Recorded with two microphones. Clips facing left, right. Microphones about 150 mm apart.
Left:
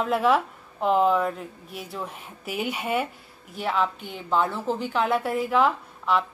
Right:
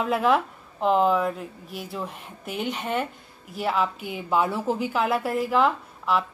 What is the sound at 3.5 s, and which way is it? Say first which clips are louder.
Speech: right 1 dB; centre (ahead or behind).